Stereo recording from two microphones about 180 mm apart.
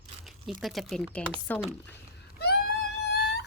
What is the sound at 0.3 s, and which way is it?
Speech, centre (ahead or behind).